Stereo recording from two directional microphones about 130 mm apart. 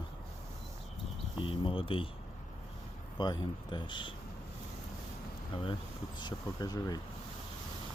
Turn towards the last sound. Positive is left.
turn(degrees=30)  # may be behind; listen again after turning